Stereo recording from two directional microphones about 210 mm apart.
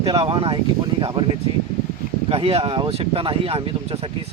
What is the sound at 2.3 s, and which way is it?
Speech, 30° right (ahead or behind).